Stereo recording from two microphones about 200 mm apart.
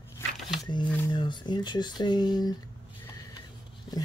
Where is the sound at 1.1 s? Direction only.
25° left (ahead or behind).